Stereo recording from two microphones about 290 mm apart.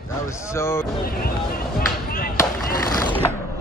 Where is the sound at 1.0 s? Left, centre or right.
Left.